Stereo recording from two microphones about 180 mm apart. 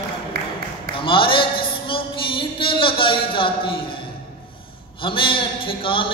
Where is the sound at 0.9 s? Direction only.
30° left (ahead or behind).